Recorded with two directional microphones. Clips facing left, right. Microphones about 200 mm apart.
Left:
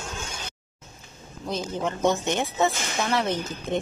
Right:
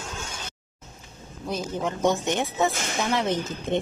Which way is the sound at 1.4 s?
10° right (ahead or behind).